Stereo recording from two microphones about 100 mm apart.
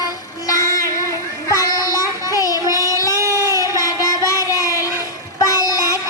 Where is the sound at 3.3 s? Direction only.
35° left (ahead or behind).